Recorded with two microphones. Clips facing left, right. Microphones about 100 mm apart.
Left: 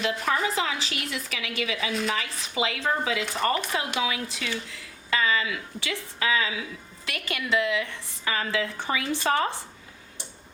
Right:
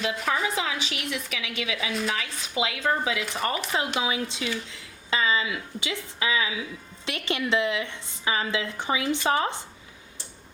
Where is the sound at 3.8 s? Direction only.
25° right (ahead or behind).